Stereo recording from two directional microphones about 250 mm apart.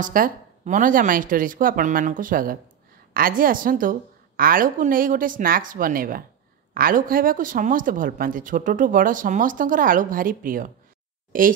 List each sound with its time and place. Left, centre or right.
0.0 s speech: right